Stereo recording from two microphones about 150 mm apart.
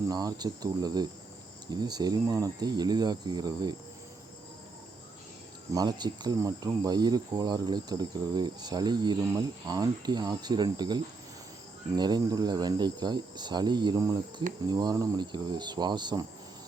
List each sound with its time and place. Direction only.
0.1 s speech: 25° right (ahead or behind)
5.7 s speech: 25° right (ahead or behind)